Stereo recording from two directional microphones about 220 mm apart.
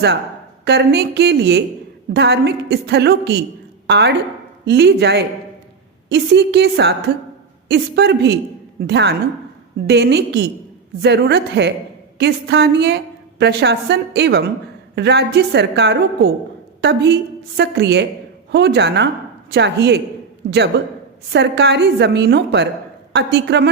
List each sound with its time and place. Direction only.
0.6 s a woman's voice: 50° right (ahead or behind)